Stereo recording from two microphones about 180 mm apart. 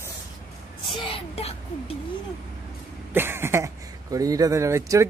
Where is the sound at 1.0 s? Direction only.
30° left (ahead or behind).